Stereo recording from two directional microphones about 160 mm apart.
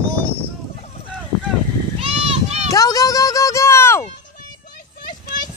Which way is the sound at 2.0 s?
35° right (ahead or behind).